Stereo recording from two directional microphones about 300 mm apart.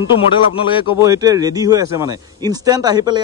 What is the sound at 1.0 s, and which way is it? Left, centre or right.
Speech, centre.